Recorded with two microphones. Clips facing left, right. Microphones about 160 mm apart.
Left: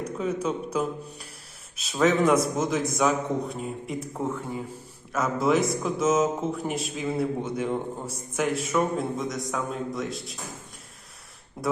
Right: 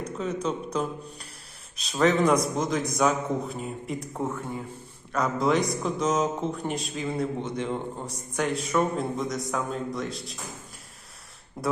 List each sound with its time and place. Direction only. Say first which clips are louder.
0.0 s a man's voice: left 1 dB; 10° left (ahead or behind)
11.6 s a man's voice: even; centre (ahead or behind)